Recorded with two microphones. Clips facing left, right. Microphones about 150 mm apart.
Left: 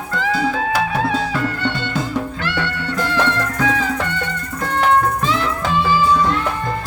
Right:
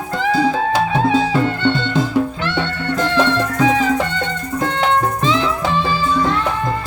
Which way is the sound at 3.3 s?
20° right (ahead or behind).